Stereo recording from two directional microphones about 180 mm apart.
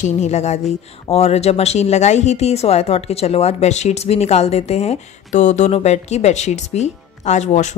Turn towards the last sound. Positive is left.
turn(degrees=40)  # may be behind; listen again after turning